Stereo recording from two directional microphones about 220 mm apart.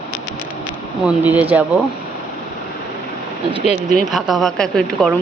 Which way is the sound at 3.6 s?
30° left (ahead or behind).